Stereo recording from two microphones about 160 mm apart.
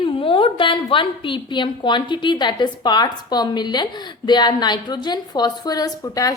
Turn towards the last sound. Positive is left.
turn(degrees=20)  # may be behind; listen again after turning